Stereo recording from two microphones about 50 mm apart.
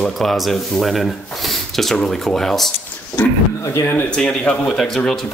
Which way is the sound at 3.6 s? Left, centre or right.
Left.